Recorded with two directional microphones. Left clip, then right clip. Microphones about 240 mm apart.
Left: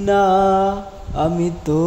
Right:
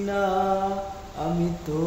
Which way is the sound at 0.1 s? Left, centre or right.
Left.